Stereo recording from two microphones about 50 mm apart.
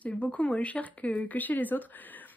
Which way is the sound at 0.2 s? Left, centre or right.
Left.